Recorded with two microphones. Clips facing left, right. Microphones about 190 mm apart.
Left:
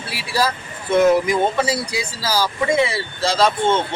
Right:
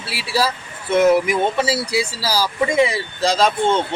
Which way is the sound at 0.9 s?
5° right (ahead or behind).